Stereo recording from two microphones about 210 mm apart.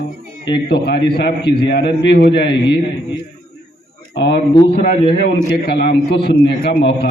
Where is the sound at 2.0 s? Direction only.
50° left (ahead or behind).